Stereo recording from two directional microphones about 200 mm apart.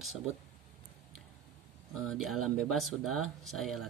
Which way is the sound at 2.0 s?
Centre (ahead or behind).